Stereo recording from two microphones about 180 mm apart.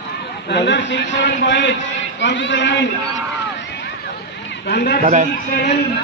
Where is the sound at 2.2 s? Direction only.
90° left.